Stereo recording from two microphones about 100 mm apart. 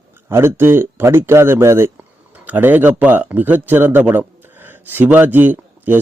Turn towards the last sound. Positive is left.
turn(degrees=-20)  # may be behind; listen again after turning